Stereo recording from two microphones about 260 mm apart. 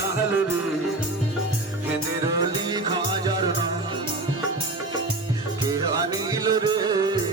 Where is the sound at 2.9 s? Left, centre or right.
Centre.